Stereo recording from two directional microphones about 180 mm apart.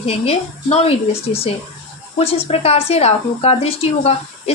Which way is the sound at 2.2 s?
35° left (ahead or behind).